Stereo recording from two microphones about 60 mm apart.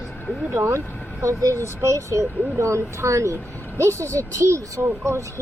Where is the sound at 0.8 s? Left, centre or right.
Left.